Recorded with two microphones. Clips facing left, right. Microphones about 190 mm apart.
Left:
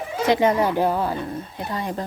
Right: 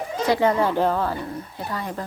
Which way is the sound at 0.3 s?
20° left (ahead or behind).